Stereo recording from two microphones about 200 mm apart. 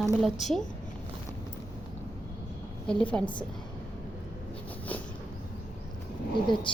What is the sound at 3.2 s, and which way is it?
Speech, 25° left (ahead or behind).